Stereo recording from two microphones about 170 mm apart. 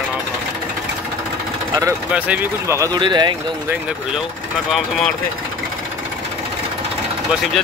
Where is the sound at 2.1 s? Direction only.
10° right (ahead or behind); by 3.3 s 25° right (ahead or behind).